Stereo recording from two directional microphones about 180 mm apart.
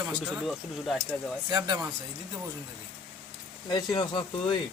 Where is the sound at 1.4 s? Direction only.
25° right (ahead or behind).